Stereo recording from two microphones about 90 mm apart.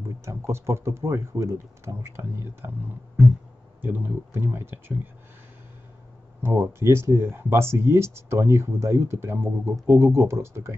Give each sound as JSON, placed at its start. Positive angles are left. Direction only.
{"t": 0.2, "sound": "speech", "side_deg": -30}
{"t": 3.8, "sound": "speech", "side_deg": -20}
{"t": 6.4, "sound": "speech", "side_deg": -30}